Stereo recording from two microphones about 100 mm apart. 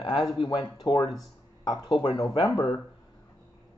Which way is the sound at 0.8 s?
45° left (ahead or behind).